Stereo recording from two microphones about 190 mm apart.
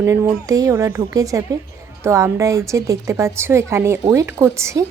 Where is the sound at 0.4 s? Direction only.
15° right (ahead or behind).